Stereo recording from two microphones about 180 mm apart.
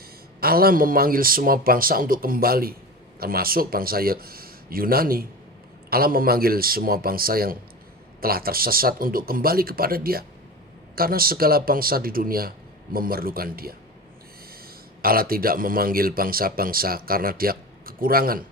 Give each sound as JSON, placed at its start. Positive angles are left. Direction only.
{"t": 0.3, "sound": "speech", "side_deg": -55}
{"t": 15.0, "sound": "speech", "side_deg": -55}